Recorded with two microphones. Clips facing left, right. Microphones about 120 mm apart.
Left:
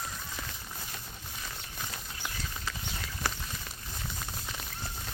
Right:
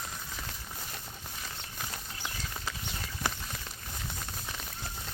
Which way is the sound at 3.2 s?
20° right (ahead or behind).